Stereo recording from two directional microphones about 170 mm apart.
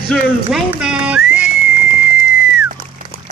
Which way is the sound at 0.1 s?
Centre (ahead or behind).